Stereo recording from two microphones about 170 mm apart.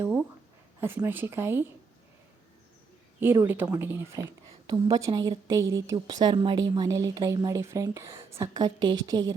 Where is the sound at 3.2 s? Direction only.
10° right (ahead or behind).